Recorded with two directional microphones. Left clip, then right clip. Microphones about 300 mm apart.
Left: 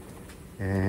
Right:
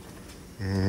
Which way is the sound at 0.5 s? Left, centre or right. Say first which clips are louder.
Left 2 dB; centre.